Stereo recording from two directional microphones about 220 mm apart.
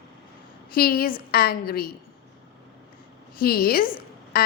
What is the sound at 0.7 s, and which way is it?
A woman's voice, 40° left (ahead or behind).